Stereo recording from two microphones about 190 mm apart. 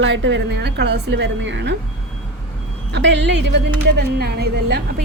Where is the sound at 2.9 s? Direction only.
65° right (ahead or behind).